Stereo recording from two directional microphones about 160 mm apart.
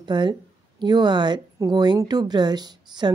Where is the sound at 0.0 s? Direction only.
30° right (ahead or behind).